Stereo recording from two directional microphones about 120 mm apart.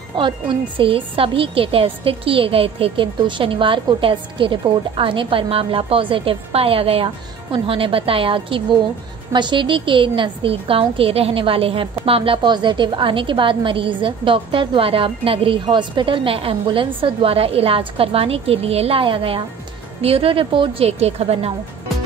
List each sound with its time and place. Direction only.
0.1 s a woman's voice: 45° right (ahead or behind); by 21.5 s 60° right (ahead or behind)